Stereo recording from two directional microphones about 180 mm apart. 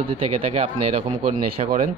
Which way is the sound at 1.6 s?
35° right (ahead or behind).